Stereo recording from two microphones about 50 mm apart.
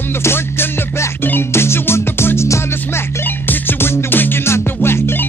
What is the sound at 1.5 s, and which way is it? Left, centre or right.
Music, left.